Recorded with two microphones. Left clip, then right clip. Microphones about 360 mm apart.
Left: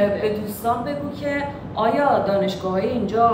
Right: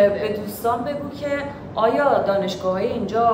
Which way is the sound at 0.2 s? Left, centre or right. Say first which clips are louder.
Even; centre.